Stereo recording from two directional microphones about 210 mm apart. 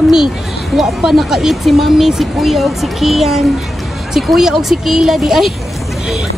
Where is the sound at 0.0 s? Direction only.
Centre (ahead or behind).